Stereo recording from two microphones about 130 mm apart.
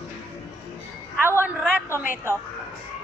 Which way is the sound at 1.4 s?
10° right (ahead or behind).